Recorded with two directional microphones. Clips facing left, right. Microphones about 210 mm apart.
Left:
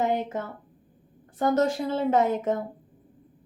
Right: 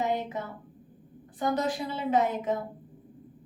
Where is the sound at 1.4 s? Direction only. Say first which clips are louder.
Left 5 dB; 45° left (ahead or behind).